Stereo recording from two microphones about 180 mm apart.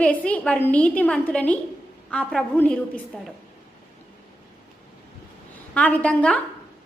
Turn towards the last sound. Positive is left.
turn(degrees=5)  # may be behind; listen again after turning